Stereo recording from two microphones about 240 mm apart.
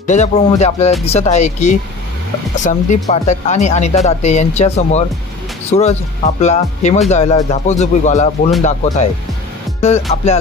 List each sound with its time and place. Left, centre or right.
0.0 s speech: left
9.8 s music: left